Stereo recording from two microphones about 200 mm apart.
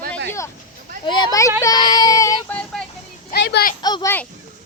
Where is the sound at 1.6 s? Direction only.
20° left (ahead or behind).